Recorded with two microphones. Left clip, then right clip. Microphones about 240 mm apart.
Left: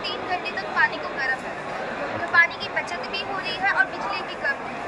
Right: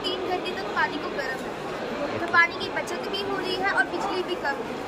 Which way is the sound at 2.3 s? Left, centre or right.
Centre.